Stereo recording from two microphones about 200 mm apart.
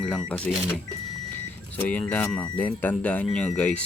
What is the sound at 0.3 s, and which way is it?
Speech, 5° left (ahead or behind).